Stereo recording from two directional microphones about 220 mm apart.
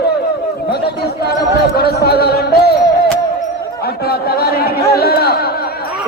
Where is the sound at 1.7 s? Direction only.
45° left (ahead or behind).